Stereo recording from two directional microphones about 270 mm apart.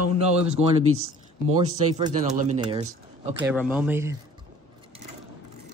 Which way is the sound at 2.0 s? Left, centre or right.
Right.